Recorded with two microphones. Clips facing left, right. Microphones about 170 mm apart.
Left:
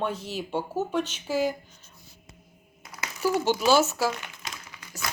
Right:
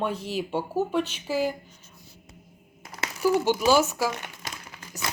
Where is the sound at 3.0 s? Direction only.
15° right (ahead or behind).